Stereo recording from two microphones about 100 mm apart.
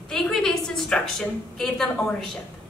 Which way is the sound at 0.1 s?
5° left (ahead or behind).